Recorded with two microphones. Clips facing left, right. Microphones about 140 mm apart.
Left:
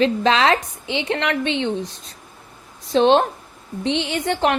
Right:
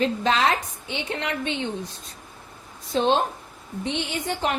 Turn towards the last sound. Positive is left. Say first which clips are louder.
# left 6 dB
turn(degrees=75)  # may be behind; listen again after turning